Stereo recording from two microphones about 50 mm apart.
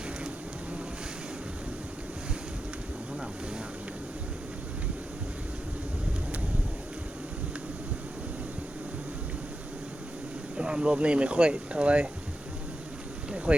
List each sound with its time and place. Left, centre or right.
10.6 s speech: centre
13.3 s boat: right